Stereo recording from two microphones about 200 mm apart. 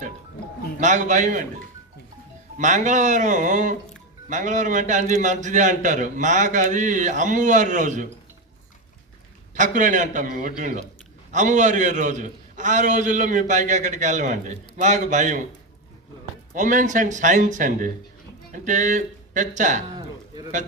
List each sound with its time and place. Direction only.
0.8 s a man's voice: 40° right (ahead or behind)
2.6 s a man's voice: 35° right (ahead or behind)
9.6 s a man's voice: 40° right (ahead or behind)
16.6 s a man's voice: 40° right (ahead or behind)